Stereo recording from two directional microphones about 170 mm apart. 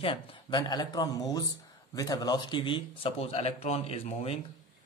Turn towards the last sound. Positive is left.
turn(degrees=35)  # may be behind; listen again after turning